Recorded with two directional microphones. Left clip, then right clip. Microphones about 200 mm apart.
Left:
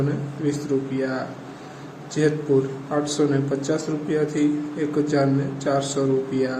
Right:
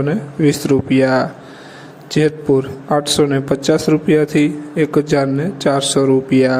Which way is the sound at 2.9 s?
50° right (ahead or behind).